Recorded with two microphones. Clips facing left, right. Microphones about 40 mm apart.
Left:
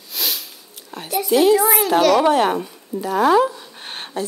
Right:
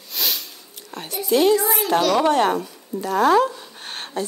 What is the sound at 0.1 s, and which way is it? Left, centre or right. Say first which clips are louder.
Sniff: even; centre.